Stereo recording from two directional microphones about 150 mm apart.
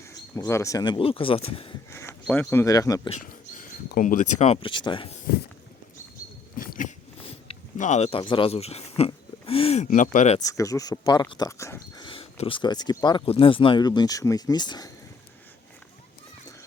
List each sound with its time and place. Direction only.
0.3 s speech: 20° left (ahead or behind)
0.9 s speech: 35° left (ahead or behind)
1.9 s speech: 15° left (ahead or behind)
3.2 s speech: 65° left (ahead or behind); by 5.1 s 35° left (ahead or behind)
6.6 s biting: 65° left (ahead or behind)
7.2 s a sound: 40° left (ahead or behind)
7.8 s speech: 50° left (ahead or behind)
10.3 s speech: 25° left (ahead or behind)
12.0 s speech: 40° left (ahead or behind)